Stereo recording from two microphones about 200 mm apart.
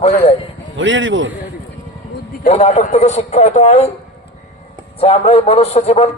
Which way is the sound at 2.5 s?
35° left (ahead or behind).